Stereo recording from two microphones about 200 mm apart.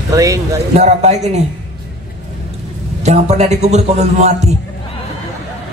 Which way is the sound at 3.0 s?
35° right (ahead or behind).